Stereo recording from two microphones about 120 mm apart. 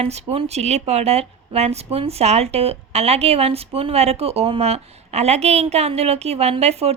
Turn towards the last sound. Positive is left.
turn(degrees=-60)  # may be behind; listen again after turning